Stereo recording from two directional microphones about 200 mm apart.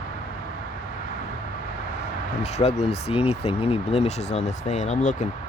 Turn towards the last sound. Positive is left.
turn(degrees=35)  # may be behind; listen again after turning